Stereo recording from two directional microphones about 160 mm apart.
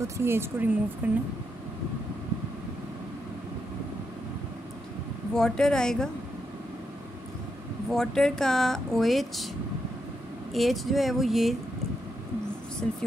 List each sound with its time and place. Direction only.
0.0 s speech: 15° right (ahead or behind)
5.3 s speech: 5° left (ahead or behind)
7.9 s speech: 5° left (ahead or behind)
10.5 s speech: centre (ahead or behind)